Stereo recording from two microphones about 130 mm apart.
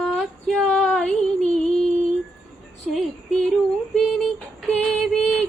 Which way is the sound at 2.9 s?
Centre (ahead or behind).